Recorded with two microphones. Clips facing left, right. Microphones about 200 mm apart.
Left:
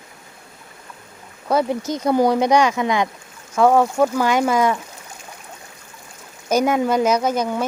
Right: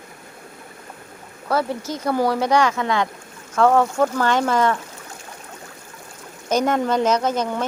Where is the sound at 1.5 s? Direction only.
15° left (ahead or behind).